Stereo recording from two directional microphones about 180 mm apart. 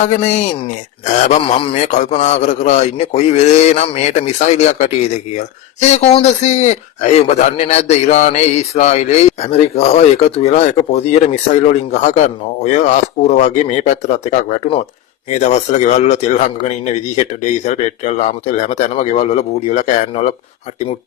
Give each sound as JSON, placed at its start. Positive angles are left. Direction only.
{"t": 0.0, "sound": "speech", "side_deg": 40}